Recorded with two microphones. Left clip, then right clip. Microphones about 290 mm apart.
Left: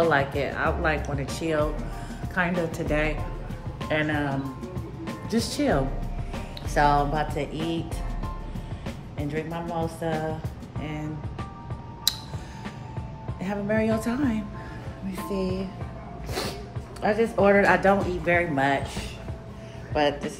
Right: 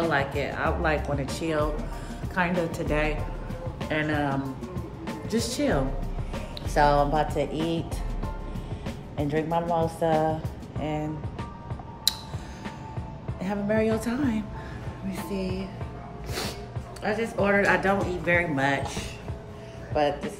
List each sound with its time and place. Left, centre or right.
0.0 s speech: centre
9.1 s speech: right
9.8 s music: centre
10.8 s speech: centre
12.1 s a sound: centre
13.4 s speech: centre
17.0 s speech: centre
19.9 s speech: left